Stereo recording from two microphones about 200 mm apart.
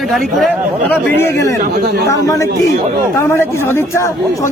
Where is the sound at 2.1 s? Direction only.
15° left (ahead or behind).